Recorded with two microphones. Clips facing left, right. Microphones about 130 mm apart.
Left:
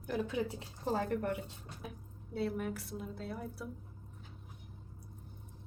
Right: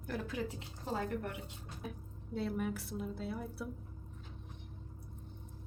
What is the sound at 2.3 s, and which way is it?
A woman's voice, centre (ahead or behind).